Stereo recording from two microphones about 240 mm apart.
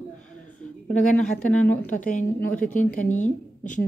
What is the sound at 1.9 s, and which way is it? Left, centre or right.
Speech, left.